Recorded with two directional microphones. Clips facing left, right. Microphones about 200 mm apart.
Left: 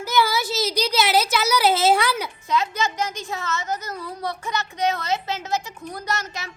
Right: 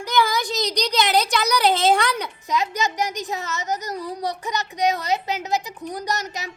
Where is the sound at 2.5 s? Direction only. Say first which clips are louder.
Even; 15° right (ahead or behind).